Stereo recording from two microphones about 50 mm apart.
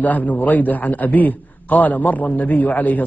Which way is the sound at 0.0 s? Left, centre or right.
Left.